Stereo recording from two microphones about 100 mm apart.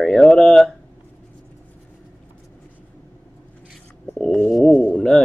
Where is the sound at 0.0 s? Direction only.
5° left (ahead or behind).